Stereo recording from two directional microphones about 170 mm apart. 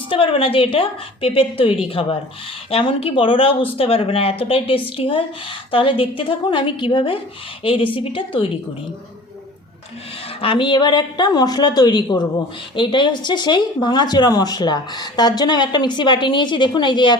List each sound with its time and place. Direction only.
0.1 s speech: 30° left (ahead or behind)
10.4 s speech: 30° left (ahead or behind)